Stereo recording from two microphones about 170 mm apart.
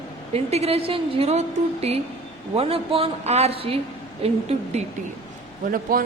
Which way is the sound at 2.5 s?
35° right (ahead or behind).